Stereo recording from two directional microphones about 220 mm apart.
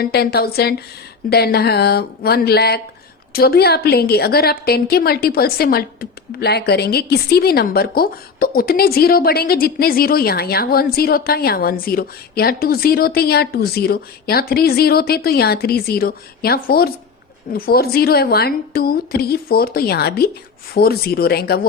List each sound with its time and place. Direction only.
0.0 s a woman's voice: 45° left (ahead or behind)